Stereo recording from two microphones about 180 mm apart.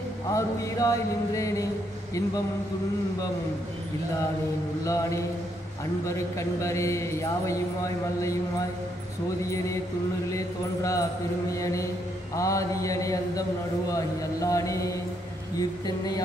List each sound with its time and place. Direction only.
0.3 s a man's voice: 20° left (ahead or behind)
6.0 s a man's voice: 15° left (ahead or behind)
10.3 s a man's voice: 20° left (ahead or behind)